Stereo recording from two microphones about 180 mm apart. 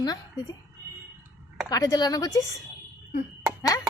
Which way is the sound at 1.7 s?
20° left (ahead or behind).